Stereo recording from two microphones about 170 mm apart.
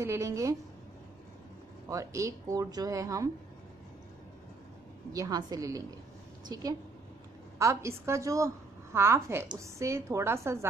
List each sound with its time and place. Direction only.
0.0 s a woman's voice: 15° right (ahead or behind)
1.9 s speech: 20° right (ahead or behind)
5.1 s a woman's voice: 20° right (ahead or behind)